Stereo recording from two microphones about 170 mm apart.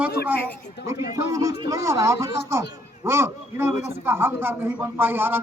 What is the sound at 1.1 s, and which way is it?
A man's voice, 20° right (ahead or behind).